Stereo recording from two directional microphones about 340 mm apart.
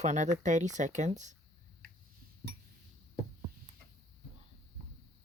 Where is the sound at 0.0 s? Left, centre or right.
Right.